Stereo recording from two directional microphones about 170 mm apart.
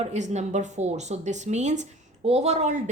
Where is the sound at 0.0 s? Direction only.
40° right (ahead or behind).